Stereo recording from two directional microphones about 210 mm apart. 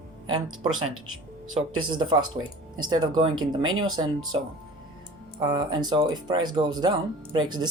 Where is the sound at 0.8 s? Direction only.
80° right.